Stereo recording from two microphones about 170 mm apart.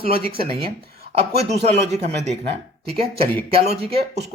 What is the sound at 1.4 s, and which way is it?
Speech, 40° right (ahead or behind).